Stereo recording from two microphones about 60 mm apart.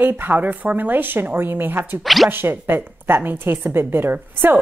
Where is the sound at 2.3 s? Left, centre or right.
Right.